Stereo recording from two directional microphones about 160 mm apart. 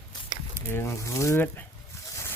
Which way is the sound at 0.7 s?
15° left (ahead or behind).